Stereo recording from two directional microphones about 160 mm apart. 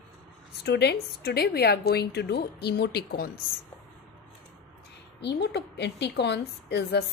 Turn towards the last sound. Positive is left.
turn(degrees=90)